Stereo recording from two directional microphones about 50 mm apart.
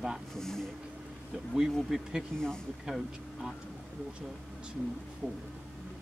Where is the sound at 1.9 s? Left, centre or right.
Centre.